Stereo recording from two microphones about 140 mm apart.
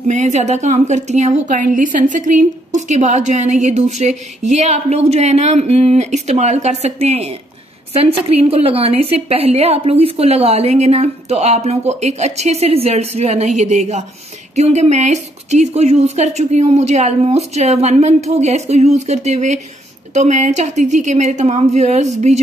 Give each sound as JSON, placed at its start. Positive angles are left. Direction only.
{"t": 0.1, "sound": "a woman's voice", "side_deg": -55}